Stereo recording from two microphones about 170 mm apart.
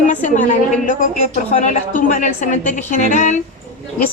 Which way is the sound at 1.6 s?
50° left (ahead or behind).